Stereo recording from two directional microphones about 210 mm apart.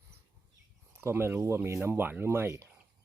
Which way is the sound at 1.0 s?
10° right (ahead or behind).